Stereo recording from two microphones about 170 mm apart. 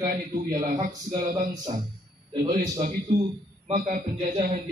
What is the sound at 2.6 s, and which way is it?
Speech, 50° right (ahead or behind).